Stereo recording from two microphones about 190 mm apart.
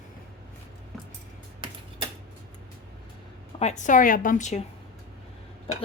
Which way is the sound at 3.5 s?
35° left (ahead or behind).